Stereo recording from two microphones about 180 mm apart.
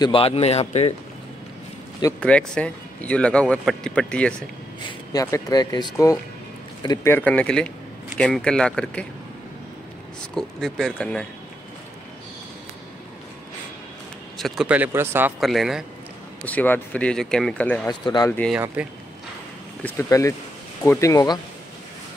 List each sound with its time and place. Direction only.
0.0 s a man's voice: 30° left (ahead or behind)
2.1 s speech: 5° left (ahead or behind)
4.8 s speech: 20° left (ahead or behind)
10.3 s speech: centre (ahead or behind)
14.4 s speech: centre (ahead or behind)
15.4 s speech: centre (ahead or behind)
16.4 s speech: 10° left (ahead or behind)
17.8 s speech: 25° left (ahead or behind)
18.8 s speech: 5° right (ahead or behind)
19.8 s speech: 15° left (ahead or behind)